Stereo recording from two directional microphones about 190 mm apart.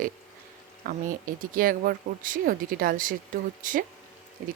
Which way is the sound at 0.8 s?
50° right (ahead or behind).